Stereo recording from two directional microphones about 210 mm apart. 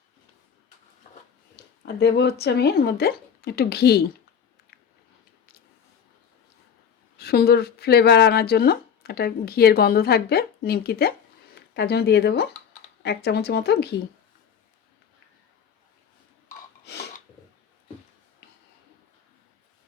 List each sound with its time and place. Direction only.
1.5 s speech: 50° left (ahead or behind)
7.2 s speech: 50° left (ahead or behind)